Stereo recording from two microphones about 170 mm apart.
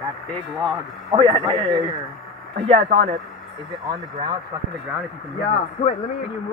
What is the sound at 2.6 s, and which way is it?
Speech, 40° right (ahead or behind).